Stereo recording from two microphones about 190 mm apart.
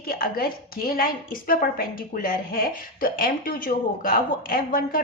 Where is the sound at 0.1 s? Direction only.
50° left (ahead or behind).